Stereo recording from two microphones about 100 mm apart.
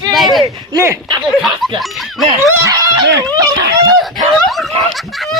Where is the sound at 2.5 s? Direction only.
35° right (ahead or behind).